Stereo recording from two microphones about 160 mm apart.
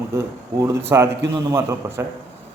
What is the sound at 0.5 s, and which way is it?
A man's voice, 20° right (ahead or behind).